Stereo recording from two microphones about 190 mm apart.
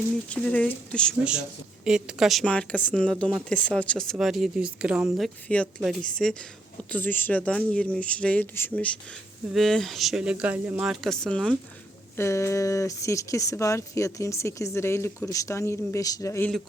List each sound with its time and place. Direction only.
0.3 s speech: 5° left (ahead or behind)
12.1 s speech: 15° left (ahead or behind)